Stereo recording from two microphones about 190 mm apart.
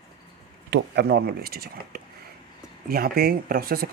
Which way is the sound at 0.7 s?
60° right (ahead or behind).